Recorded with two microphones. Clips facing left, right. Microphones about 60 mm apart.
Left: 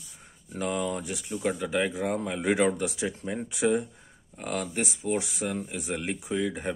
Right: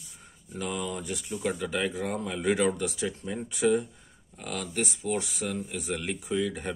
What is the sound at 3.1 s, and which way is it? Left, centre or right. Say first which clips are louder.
Speech: left 1 dB; left.